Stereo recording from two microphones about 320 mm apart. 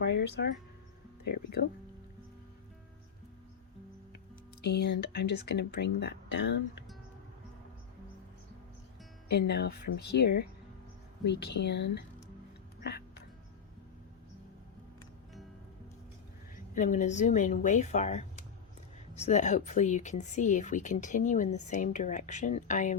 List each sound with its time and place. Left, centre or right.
0.0 s speech: left
4.6 s speech: left
9.3 s speech: left
16.7 s speech: left